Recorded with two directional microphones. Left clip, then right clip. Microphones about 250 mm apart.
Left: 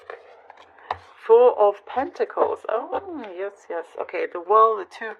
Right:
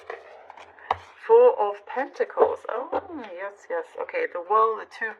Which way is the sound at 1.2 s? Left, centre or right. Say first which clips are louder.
Left 2 dB; left.